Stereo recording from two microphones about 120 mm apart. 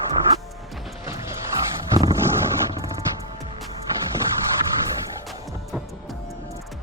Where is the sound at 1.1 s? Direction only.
20° right (ahead or behind).